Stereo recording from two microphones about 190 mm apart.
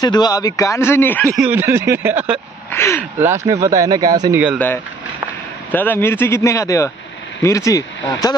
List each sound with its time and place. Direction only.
0.0 s a man's voice: 20° left (ahead or behind)
1.3 s speech: 10° right (ahead or behind)
2.7 s a man's voice: 15° left (ahead or behind)
3.2 s speech: 15° right (ahead or behind)
5.7 s a man's voice: 10° left (ahead or behind)